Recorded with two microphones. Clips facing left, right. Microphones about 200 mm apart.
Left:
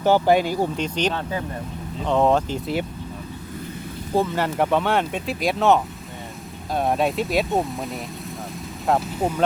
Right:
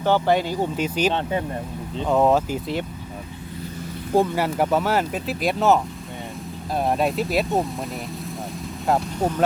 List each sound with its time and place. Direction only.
0.0 s speech: 10° left (ahead or behind)
0.8 s speech: 5° right (ahead or behind)
1.1 s speech: 25° right (ahead or behind)
2.0 s speech: 5° right (ahead or behind)
4.1 s speech: 10° right (ahead or behind)
8.9 s speech: 5° left (ahead or behind)